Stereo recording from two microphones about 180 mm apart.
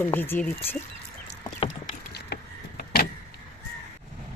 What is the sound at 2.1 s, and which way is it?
Vehicle, 60° left (ahead or behind).